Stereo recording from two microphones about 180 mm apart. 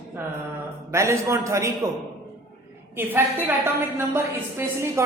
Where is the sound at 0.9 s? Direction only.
15° right (ahead or behind).